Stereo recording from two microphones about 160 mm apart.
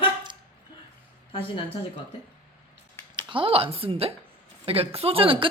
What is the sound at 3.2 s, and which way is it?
A woman's voice, 30° right (ahead or behind).